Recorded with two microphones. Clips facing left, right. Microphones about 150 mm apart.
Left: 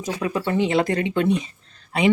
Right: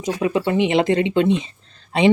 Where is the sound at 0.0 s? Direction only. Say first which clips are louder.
Right 4 dB; 20° right (ahead or behind).